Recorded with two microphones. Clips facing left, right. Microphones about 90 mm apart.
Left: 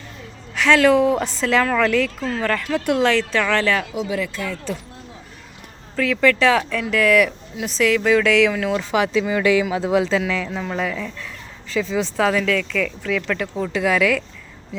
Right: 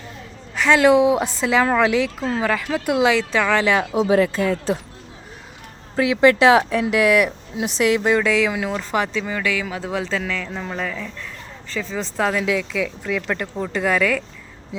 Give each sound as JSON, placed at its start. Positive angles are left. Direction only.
{"t": 0.5, "sound": "speech", "side_deg": -5}
{"t": 3.9, "sound": "speech", "side_deg": -30}
{"t": 4.2, "sound": "speech", "side_deg": -45}
{"t": 6.1, "sound": "speech", "side_deg": -30}
{"t": 6.9, "sound": "speech", "side_deg": -10}
{"t": 7.5, "sound": "speech", "side_deg": -25}
{"t": 7.9, "sound": "speech", "side_deg": -10}
{"t": 9.4, "sound": "speech", "side_deg": 20}